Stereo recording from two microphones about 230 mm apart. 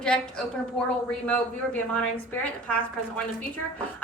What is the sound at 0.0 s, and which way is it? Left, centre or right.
A woman's voice, centre.